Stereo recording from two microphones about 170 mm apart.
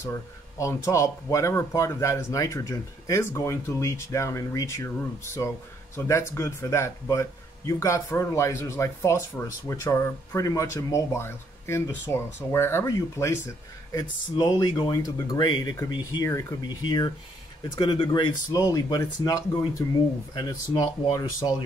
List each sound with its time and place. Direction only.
0.0 s speech: 15° left (ahead or behind)